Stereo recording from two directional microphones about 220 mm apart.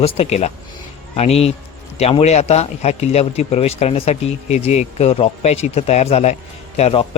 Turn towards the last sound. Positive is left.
turn(degrees=30)  # may be behind; listen again after turning